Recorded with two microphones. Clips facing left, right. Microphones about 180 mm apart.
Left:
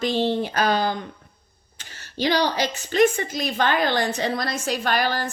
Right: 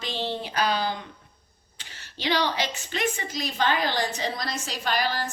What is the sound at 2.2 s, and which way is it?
A woman's voice, 40° left (ahead or behind).